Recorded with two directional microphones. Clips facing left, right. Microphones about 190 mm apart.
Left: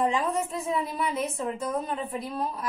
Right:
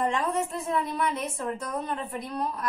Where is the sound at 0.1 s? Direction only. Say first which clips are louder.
Even; centre (ahead or behind).